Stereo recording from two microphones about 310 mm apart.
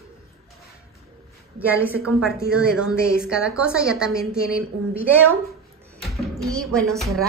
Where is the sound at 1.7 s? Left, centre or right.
Centre.